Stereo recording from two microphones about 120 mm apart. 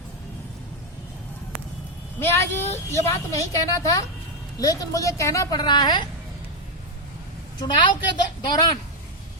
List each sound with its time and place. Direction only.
2.1 s a woman's voice: 20° left (ahead or behind); by 6.1 s 35° left (ahead or behind)
7.6 s a woman's voice: 40° left (ahead or behind)